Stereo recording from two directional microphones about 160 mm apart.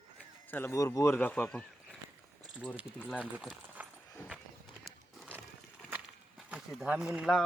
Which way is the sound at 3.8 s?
10° right (ahead or behind).